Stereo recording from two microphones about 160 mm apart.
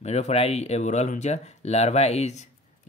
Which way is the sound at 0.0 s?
40° left (ahead or behind).